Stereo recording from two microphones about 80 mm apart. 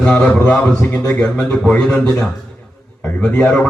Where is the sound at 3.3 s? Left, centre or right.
Centre.